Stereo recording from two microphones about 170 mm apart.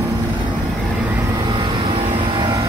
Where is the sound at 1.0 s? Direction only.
15° right (ahead or behind).